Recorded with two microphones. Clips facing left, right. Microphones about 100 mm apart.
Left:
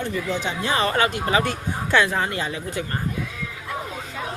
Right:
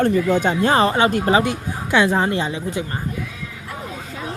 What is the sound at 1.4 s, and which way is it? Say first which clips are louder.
Speech: right 2 dB; 15° right (ahead or behind).